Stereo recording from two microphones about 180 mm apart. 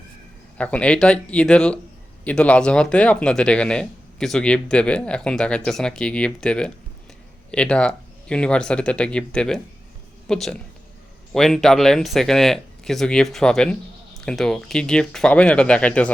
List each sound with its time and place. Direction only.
0.6 s speech: 5° left (ahead or behind)